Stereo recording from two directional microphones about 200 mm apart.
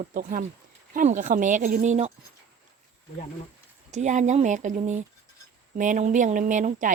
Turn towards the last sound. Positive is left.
turn(degrees=-40)  # may be behind; listen again after turning